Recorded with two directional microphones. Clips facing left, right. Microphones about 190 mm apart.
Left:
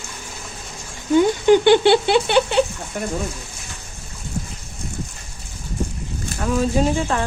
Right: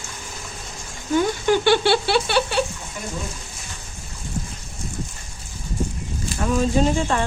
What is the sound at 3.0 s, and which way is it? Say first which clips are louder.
Speech: left 7 dB; 55° left (ahead or behind).